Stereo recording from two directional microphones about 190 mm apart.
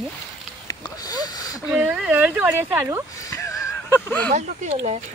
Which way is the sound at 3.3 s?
15° left (ahead or behind).